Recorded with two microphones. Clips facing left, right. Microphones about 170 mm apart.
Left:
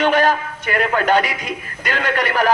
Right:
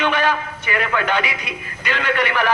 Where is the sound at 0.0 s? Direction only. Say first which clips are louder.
Left 4 dB; 40° left (ahead or behind).